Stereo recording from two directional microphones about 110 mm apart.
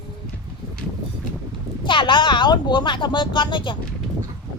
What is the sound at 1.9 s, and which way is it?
Speech, 50° left (ahead or behind).